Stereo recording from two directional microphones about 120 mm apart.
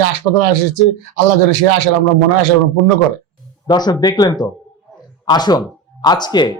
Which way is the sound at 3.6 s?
35° left (ahead or behind).